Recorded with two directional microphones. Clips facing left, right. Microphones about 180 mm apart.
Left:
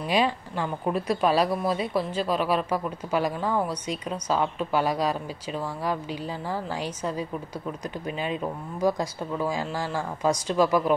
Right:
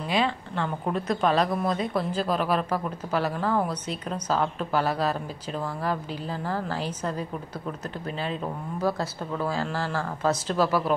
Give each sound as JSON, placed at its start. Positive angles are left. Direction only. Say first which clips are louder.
{"t": 0.1, "sound": "a woman's voice", "louder": "left 2 dB", "side_deg": 15}
{"t": 8.2, "sound": "a woman's voice", "louder": "left 1 dB", "side_deg": 10}